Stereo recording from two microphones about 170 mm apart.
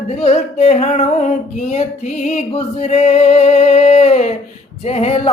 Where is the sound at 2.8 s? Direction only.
40° left (ahead or behind).